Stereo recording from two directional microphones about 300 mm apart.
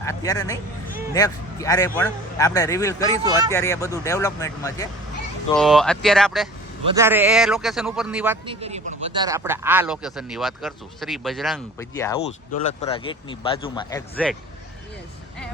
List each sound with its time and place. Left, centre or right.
0.0 s speech: centre
5.5 s speech: centre
8.4 s speech: centre
14.2 s speech: centre